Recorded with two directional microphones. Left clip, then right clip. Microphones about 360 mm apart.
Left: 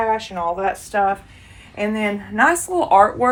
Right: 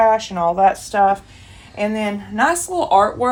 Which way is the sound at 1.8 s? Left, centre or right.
Centre.